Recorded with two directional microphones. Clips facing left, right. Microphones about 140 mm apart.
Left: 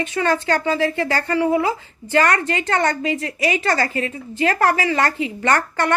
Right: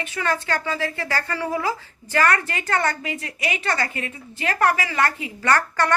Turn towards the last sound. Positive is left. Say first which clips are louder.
# left 2 dB
turn(degrees=20)  # may be behind; listen again after turning